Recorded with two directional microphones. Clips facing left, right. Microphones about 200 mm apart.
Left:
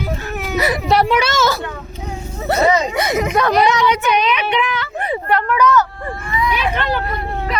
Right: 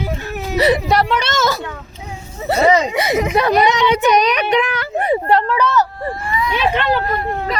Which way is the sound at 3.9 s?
40° right (ahead or behind).